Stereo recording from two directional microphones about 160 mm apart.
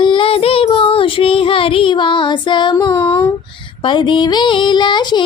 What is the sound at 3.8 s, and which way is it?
A woman's voice, 30° left (ahead or behind).